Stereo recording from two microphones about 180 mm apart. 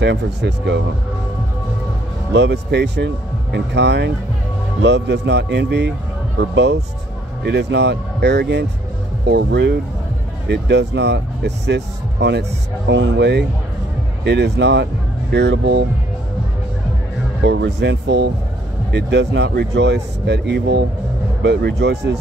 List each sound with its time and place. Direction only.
0.0 s speech: 75° right (ahead or behind)
2.3 s speech: 75° right (ahead or behind)
17.4 s speech: 70° right (ahead or behind)